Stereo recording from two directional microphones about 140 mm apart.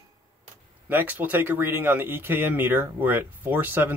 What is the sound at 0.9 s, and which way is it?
Speech, 15° right (ahead or behind).